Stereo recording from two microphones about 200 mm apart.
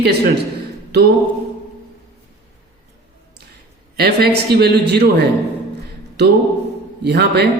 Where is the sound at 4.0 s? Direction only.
55° right (ahead or behind).